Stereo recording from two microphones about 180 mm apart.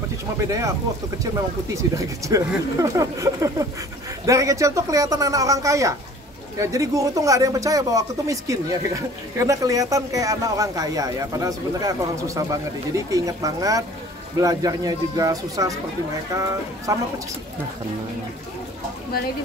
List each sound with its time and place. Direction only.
0.5 s speech: 15° right (ahead or behind)
16.9 s speech: 20° right (ahead or behind)